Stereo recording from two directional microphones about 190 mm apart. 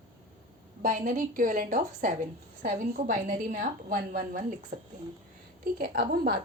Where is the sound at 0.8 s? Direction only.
45° right (ahead or behind).